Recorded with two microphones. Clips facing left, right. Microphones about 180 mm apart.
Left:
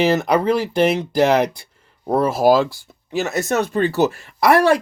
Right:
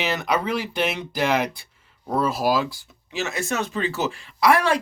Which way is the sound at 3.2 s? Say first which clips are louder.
Left 5 dB; 40° left (ahead or behind).